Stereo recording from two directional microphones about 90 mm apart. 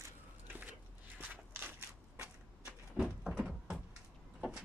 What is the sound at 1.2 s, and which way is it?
Walk, 20° right (ahead or behind).